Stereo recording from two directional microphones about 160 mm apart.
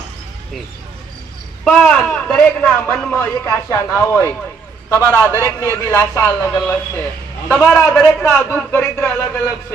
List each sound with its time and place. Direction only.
1.6 s a man's voice: 5° left (ahead or behind)